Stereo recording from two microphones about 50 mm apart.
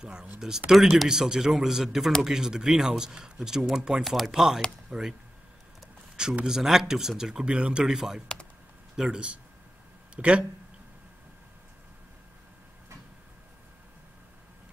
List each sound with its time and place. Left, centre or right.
0.0 s speech: centre
6.4 s speech: centre
7.4 s speech: right
7.8 s speech: centre
10.1 s speech: right